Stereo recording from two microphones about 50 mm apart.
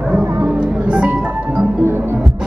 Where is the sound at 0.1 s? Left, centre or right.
Right.